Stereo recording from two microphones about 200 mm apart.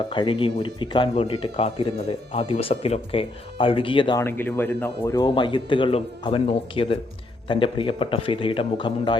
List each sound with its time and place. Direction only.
0.1 s speech: 25° left (ahead or behind)
4.2 s speech: 10° left (ahead or behind)